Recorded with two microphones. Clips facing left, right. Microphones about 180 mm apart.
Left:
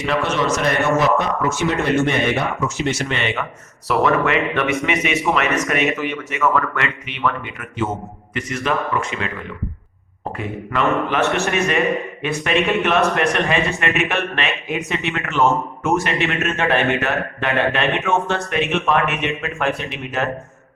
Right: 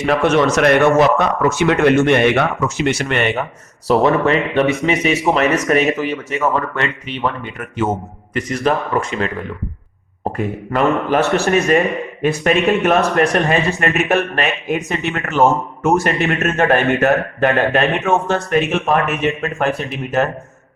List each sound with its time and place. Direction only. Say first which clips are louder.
0.0 s a man's voice: right 6 dB; 50° right (ahead or behind)
3.8 s a man's voice: right 4 dB; 35° right (ahead or behind)
10.3 s a man's voice: right 4 dB; 40° right (ahead or behind)